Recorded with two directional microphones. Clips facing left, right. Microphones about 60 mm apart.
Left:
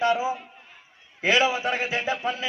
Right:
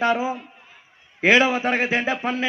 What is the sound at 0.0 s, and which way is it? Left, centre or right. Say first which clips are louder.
Speech: right 2 dB; right.